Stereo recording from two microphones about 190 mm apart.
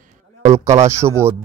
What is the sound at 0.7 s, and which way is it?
Speech, 15° right (ahead or behind).